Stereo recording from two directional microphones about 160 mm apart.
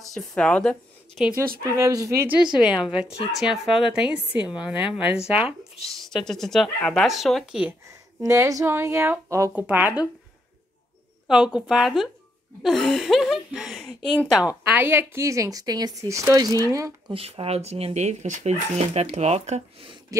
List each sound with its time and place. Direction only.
0.0 s speech: centre (ahead or behind)
1.7 s a woman's voice: 20° right (ahead or behind); by 7.7 s centre (ahead or behind)
7.9 s speech: 20° right (ahead or behind)
11.2 s a woman's voice: 5° right (ahead or behind)
14.7 s a woman's voice: 15° right (ahead or behind)
17.1 s speech: 35° right (ahead or behind)